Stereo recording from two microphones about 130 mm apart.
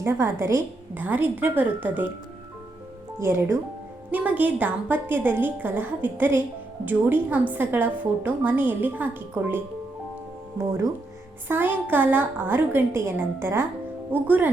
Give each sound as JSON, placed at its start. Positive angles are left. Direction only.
{"t": 0.0, "sound": "a woman's voice", "side_deg": -20}
{"t": 3.2, "sound": "a woman's voice", "side_deg": -20}
{"t": 11.4, "sound": "a woman's voice", "side_deg": -15}